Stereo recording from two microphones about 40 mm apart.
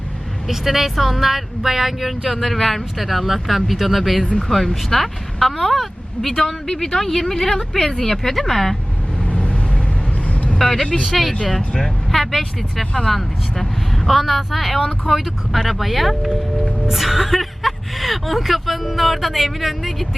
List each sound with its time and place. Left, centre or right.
0.4 s speech: centre
2.3 s speech: centre
9.2 s vehicle: left
10.6 s speech: centre
12.8 s speech: left
13.1 s speech: centre